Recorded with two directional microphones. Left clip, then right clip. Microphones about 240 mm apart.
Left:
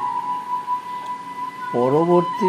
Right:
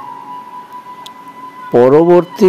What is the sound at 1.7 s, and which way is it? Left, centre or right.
Speech, right.